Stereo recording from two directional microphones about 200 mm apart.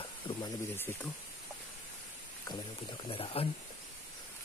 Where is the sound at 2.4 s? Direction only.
20° left (ahead or behind).